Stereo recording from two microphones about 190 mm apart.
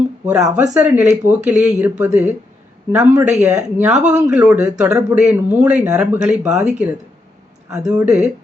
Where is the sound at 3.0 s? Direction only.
10° right (ahead or behind).